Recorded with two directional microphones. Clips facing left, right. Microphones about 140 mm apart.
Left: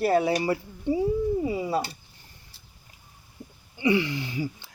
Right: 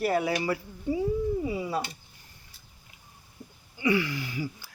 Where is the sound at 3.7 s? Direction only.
25° left (ahead or behind).